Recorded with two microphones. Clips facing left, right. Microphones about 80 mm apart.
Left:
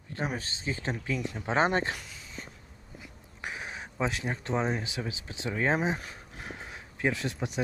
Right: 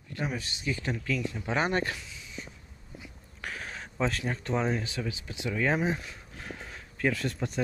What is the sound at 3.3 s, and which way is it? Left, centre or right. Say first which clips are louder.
Speech: left 1 dB; centre.